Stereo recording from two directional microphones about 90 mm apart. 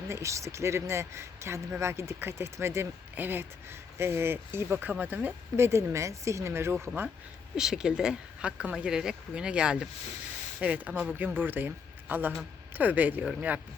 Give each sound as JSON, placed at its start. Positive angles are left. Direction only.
{"t": 0.1, "sound": "speech", "side_deg": -35}
{"t": 7.5, "sound": "speech", "side_deg": -5}